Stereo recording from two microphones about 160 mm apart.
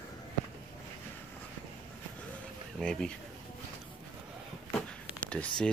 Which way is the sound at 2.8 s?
5° left (ahead or behind).